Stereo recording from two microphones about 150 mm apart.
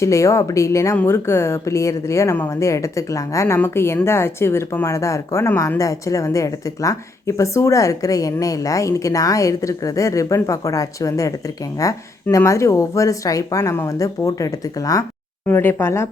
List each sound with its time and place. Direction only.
0.0 s speech: 20° left (ahead or behind)